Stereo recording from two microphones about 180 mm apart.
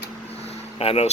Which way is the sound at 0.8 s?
35° left (ahead or behind).